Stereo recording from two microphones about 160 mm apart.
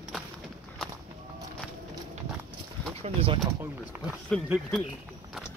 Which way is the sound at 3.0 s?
35° right (ahead or behind).